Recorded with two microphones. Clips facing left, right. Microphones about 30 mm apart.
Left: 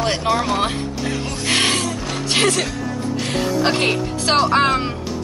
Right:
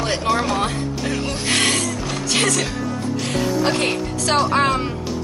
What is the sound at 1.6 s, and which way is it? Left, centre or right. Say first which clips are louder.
Music: left 1 dB; left.